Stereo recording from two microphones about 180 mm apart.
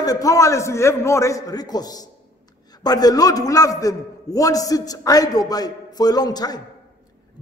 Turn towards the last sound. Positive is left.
turn(degrees=20)  # may be behind; listen again after turning